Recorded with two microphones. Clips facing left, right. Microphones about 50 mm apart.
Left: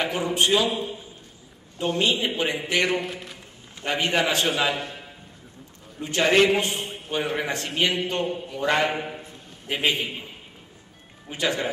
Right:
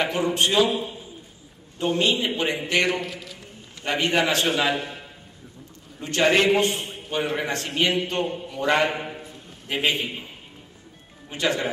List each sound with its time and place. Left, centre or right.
0.1 s a man's voice: centre
0.4 s a man's voice: centre
3.0 s a man's voice: left
3.8 s a man's voice: centre
6.2 s a man's voice: centre
11.2 s a man's voice: centre